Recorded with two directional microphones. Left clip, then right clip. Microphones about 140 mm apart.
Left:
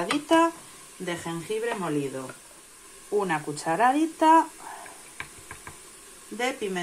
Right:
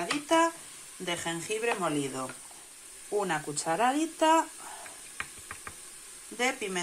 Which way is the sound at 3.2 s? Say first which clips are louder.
Left 4 dB; 10° right (ahead or behind).